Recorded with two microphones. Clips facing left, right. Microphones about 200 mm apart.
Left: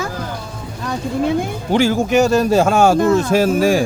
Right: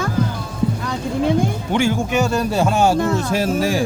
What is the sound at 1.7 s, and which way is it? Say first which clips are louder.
Speech: left 7 dB; 35° left (ahead or behind).